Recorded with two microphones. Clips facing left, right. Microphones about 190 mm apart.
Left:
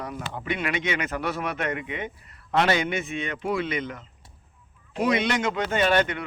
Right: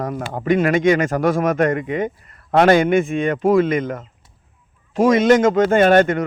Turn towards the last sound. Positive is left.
turn(degrees=-45)  # may be behind; listen again after turning